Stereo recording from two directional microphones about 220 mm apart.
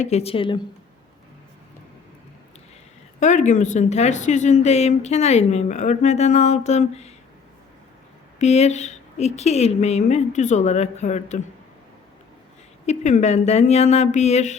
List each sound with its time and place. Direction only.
0.0 s speech: 30° left (ahead or behind)
3.2 s a woman's voice: 35° left (ahead or behind)
8.4 s a woman's voice: 30° left (ahead or behind)
12.8 s a woman's voice: 30° left (ahead or behind)